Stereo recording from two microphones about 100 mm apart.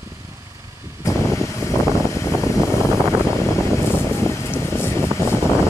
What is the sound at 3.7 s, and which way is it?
Vehicle, 30° left (ahead or behind).